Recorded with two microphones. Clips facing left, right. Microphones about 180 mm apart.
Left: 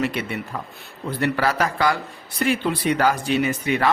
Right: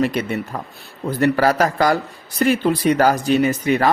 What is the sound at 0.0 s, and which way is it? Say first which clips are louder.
Speech: right 5 dB; 40° right (ahead or behind).